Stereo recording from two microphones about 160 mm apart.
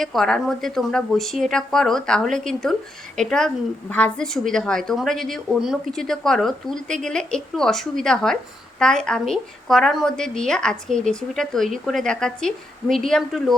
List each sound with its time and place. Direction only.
0.0 s a woman's voice: centre (ahead or behind)